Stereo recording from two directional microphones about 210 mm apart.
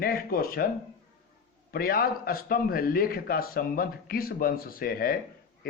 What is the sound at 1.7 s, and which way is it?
A man's voice, 45° left (ahead or behind).